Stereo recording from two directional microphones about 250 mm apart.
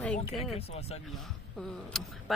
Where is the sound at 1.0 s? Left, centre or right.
Centre.